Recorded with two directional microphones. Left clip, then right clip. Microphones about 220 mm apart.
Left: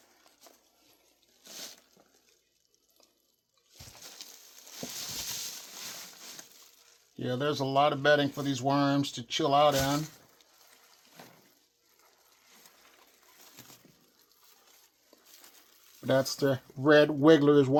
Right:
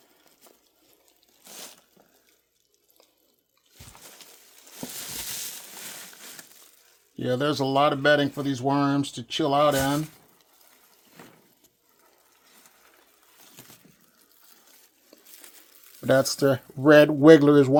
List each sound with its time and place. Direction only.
5.1 s a sound: 30° right (ahead or behind)
7.2 s speech: 40° right (ahead or behind)
16.0 s speech: 25° right (ahead or behind)